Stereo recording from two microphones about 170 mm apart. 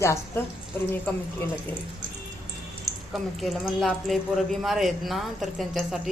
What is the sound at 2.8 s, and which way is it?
Speech, centre (ahead or behind).